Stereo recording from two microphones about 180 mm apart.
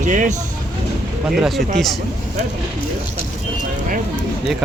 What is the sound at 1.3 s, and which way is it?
Speech, centre (ahead or behind).